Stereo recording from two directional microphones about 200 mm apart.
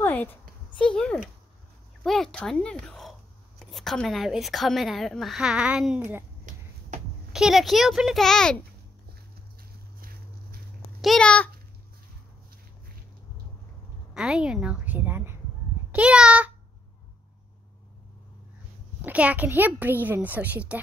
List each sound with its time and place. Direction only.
0.0 s speech: 10° left (ahead or behind); by 6.2 s 10° right (ahead or behind)
7.3 s speech: centre (ahead or behind)
9.6 s a sound: 50° right (ahead or behind)
11.0 s speech: 5° left (ahead or behind)
14.1 s a sound: 5° right (ahead or behind)
15.9 s a child's voice: 5° right (ahead or behind)
18.9 s a child's voice: 10° right (ahead or behind)